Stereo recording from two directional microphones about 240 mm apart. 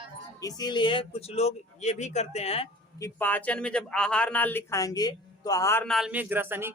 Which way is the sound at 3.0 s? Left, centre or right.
Centre.